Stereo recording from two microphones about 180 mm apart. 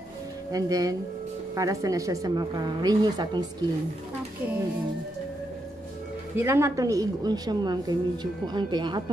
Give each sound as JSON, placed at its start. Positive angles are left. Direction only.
{"t": 0.5, "sound": "a woman's voice", "side_deg": -20}
{"t": 6.3, "sound": "a woman's voice", "side_deg": -15}